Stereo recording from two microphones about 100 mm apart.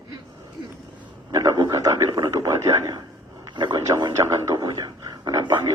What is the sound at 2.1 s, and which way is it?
Speech, 35° right (ahead or behind).